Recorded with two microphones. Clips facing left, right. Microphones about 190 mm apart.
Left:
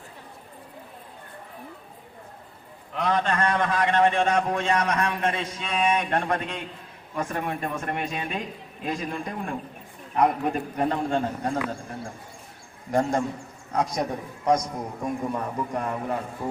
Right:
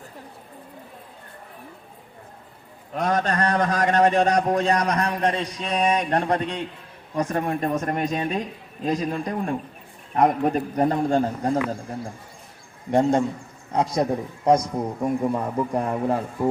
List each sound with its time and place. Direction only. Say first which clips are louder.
2.9 s a man's voice: right 2 dB; 45° right (ahead or behind)
12.9 s a man's voice: right 4 dB; 25° right (ahead or behind)